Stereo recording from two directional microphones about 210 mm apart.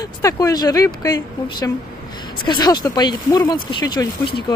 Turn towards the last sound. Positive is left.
turn(degrees=20)  # may be behind; listen again after turning